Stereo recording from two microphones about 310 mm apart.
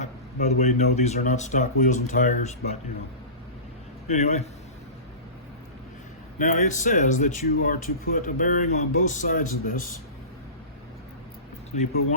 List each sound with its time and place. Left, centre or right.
0.0 s speech: left
4.1 s speech: left
6.4 s speech: left